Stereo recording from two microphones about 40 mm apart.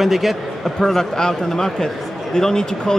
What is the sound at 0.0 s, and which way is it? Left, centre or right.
Speech, centre.